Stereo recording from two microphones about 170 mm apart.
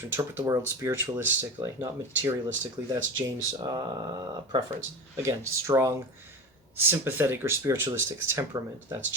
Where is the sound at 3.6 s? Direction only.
25° right (ahead or behind).